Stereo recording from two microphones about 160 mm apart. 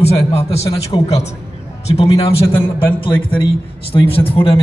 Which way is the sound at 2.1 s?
15° left (ahead or behind).